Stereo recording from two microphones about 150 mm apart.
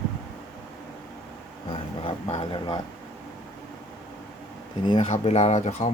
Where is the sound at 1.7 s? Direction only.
40° left (ahead or behind).